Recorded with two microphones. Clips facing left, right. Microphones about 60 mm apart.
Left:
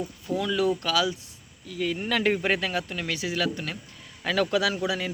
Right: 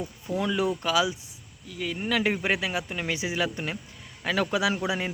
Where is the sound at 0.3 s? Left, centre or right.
Right.